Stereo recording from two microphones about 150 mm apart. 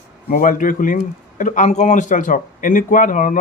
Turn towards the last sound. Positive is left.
turn(degrees=60)  # may be behind; listen again after turning